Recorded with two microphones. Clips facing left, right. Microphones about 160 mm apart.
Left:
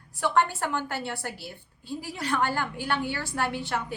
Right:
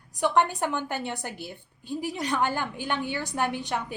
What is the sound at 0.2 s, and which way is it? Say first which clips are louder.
A woman's voice: right 1 dB; 15° right (ahead or behind).